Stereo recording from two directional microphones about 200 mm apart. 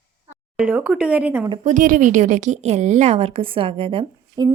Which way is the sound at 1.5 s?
40° right (ahead or behind).